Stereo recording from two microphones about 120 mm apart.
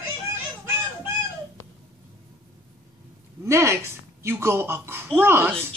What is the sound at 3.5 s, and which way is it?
Speech, 25° right (ahead or behind).